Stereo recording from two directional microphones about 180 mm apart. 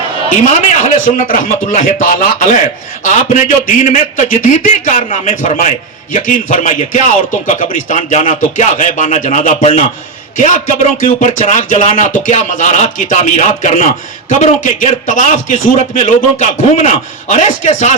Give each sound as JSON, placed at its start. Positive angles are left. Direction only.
{"t": 0.4, "sound": "speech", "side_deg": 40}